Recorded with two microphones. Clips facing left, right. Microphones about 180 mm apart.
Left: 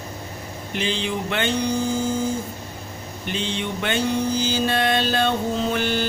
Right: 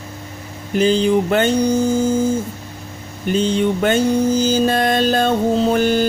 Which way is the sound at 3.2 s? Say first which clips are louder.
Right 11 dB; 45° right (ahead or behind).